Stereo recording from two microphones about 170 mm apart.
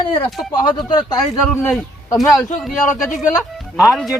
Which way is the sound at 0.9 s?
25° left (ahead or behind).